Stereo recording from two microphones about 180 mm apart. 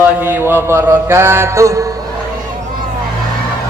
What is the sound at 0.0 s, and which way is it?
A man's voice, 10° right (ahead or behind).